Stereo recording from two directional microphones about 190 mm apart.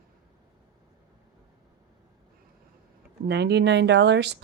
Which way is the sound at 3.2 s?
60° right (ahead or behind).